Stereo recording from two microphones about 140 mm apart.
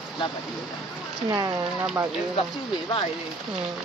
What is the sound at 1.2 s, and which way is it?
Speech, 30° right (ahead or behind).